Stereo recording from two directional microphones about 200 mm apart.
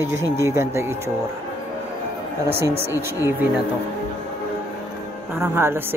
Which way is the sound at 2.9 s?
10° right (ahead or behind).